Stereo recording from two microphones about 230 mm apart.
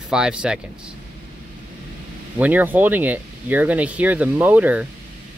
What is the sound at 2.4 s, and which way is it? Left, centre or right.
Speech, centre.